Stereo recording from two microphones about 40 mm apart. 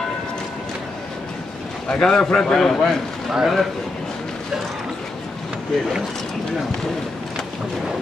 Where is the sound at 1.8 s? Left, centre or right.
Centre.